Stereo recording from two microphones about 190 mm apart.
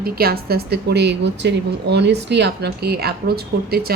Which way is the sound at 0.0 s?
55° right (ahead or behind).